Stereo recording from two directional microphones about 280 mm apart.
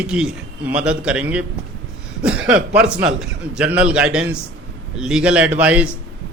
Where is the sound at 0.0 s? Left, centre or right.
Centre.